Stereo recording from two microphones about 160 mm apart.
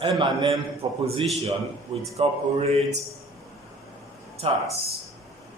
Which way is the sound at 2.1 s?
40° right (ahead or behind).